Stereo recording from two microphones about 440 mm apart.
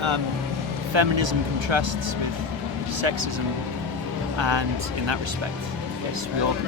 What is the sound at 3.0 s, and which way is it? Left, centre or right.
Speech, right.